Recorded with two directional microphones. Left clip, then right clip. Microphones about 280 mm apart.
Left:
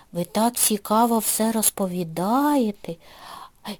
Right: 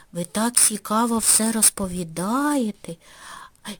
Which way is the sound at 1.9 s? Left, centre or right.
Centre.